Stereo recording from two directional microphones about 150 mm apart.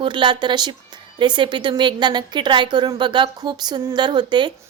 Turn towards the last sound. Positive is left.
turn(degrees=-30)  # may be behind; listen again after turning